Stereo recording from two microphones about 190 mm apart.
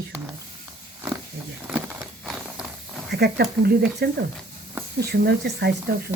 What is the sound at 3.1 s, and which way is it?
Speech, 55° right (ahead or behind).